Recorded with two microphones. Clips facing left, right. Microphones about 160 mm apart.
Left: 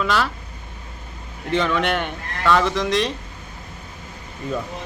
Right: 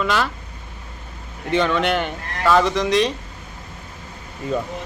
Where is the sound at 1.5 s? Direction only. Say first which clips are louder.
Right 2 dB; centre (ahead or behind).